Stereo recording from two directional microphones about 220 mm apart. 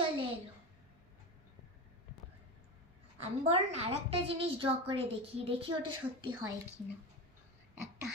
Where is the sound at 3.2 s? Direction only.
30° right (ahead or behind).